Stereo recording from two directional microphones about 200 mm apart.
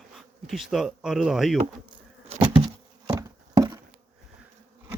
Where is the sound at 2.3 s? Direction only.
25° right (ahead or behind).